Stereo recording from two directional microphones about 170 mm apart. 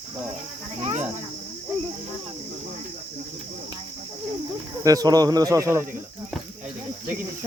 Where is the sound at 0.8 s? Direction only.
40° right (ahead or behind).